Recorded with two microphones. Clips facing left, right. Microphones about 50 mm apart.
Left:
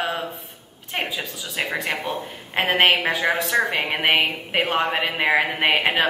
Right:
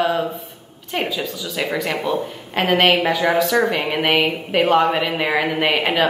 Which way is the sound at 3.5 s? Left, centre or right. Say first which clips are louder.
Right 3 dB; centre.